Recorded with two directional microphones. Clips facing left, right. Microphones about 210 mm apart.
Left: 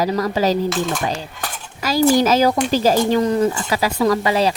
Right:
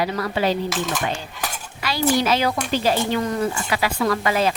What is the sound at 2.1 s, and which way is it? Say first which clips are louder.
Speech: left 3 dB; 40° left (ahead or behind).